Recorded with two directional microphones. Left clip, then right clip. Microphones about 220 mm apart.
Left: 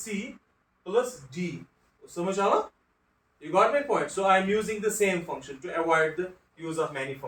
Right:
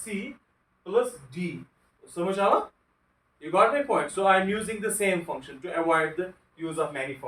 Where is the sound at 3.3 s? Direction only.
20° right (ahead or behind).